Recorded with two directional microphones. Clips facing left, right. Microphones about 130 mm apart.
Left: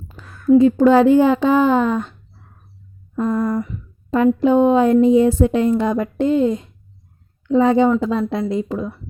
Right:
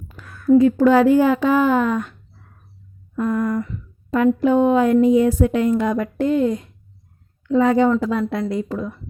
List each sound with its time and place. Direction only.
0.2 s a sound: 25° left (ahead or behind)
0.6 s speech: 25° left (ahead or behind)
3.2 s a woman's voice: 30° left (ahead or behind)